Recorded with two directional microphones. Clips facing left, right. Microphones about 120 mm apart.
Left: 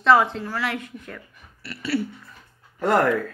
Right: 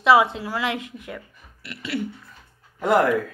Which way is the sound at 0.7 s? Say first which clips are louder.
Even; 90° right.